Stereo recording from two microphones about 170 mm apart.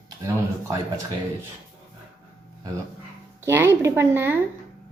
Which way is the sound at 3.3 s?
15° right (ahead or behind).